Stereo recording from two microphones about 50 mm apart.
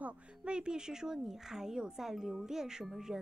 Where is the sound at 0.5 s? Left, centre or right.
Centre.